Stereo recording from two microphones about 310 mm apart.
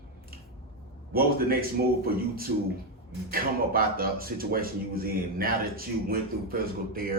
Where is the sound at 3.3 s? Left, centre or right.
Right.